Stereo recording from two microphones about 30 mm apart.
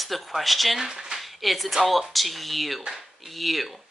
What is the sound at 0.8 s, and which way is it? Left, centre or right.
Speech, right.